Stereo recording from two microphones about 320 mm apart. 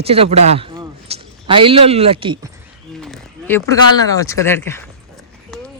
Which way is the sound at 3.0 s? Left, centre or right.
Centre.